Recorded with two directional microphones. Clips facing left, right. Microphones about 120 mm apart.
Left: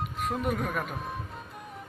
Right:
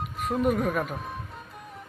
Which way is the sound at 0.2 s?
Centre (ahead or behind).